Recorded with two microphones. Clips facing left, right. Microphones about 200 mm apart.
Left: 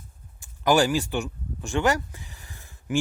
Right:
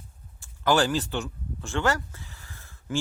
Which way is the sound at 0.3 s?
15° left (ahead or behind).